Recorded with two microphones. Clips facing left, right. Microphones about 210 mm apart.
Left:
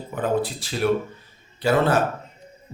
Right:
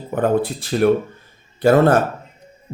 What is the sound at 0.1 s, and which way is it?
Speech, 55° right (ahead or behind).